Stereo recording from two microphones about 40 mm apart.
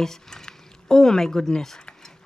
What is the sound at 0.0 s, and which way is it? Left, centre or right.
Speech, centre.